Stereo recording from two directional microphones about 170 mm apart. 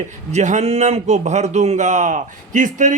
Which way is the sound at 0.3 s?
45° right (ahead or behind).